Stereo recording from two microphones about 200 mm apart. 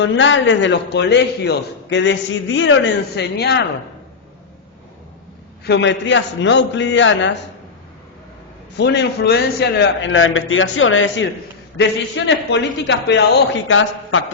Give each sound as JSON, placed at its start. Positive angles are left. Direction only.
{"t": 0.0, "sound": "a man's voice", "side_deg": 70}
{"t": 5.6, "sound": "a man's voice", "side_deg": 60}
{"t": 8.8, "sound": "a man's voice", "side_deg": 55}
{"t": 11.8, "sound": "a man's voice", "side_deg": 65}
{"t": 13.7, "sound": "a man's voice", "side_deg": 75}